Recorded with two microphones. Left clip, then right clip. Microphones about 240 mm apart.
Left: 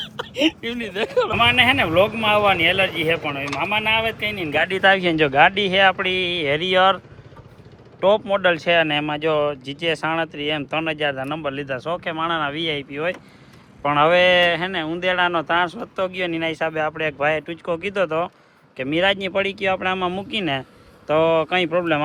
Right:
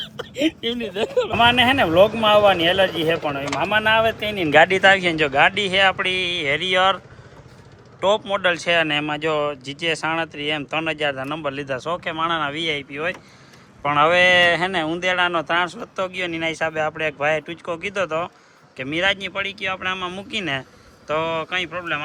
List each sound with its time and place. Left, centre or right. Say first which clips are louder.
0.0 s speech: left 2 dB; centre
4.7 s speech: right 1 dB; centre
8.0 s speech: left 2 dB; centre